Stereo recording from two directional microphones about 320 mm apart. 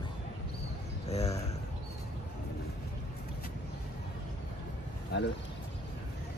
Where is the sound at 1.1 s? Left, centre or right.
Centre.